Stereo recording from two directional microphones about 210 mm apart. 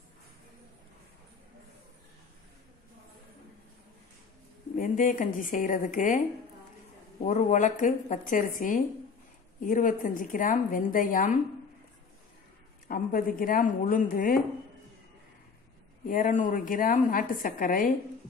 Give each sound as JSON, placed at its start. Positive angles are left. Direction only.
{"t": 4.7, "sound": "a woman's voice", "side_deg": 40}
{"t": 7.2, "sound": "a woman's voice", "side_deg": 35}
{"t": 12.8, "sound": "speech", "side_deg": 45}
{"t": 16.1, "sound": "a woman's voice", "side_deg": 40}